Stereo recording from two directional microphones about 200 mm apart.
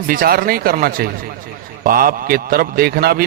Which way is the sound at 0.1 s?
45° right (ahead or behind).